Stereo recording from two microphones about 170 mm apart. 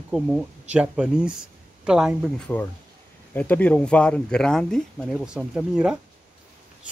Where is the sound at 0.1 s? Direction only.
5° right (ahead or behind).